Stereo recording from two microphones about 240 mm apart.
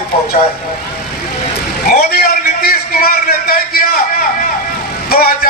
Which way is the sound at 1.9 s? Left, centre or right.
Left.